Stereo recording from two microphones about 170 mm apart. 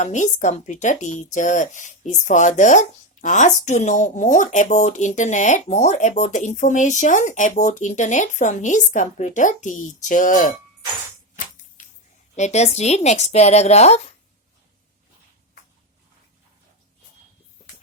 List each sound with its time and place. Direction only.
0.0 s speech: 45° left (ahead or behind)
12.4 s a woman's voice: 40° left (ahead or behind)